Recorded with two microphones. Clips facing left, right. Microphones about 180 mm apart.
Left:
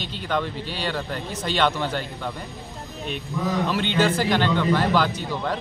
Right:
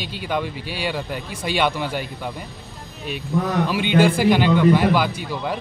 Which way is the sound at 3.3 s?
60° right (ahead or behind).